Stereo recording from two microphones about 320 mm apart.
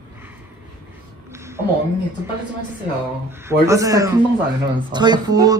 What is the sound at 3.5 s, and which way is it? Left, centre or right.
Speech, centre.